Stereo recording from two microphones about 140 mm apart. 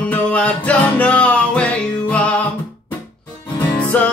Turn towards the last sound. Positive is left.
turn(degrees=10)  # may be behind; listen again after turning